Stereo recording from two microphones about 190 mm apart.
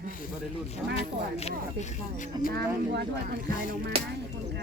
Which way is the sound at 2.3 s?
20° right (ahead or behind).